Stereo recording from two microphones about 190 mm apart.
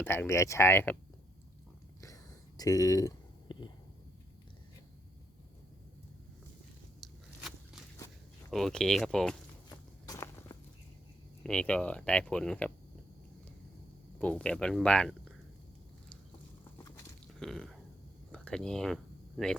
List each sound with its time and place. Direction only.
0.0 s speech: 10° left (ahead or behind)
2.6 s speech: 20° left (ahead or behind)
3.5 s a sound: 25° left (ahead or behind)
7.9 s walk: 15° left (ahead or behind)
8.5 s speech: centre (ahead or behind)
9.6 s walk: 20° left (ahead or behind)
11.4 s speech: 5° left (ahead or behind)
14.2 s speech: 5° left (ahead or behind)
17.4 s speech: centre (ahead or behind)